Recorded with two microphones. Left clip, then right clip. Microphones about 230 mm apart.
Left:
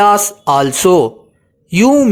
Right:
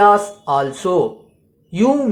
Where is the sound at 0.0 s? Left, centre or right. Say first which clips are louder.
Left 2 dB; left.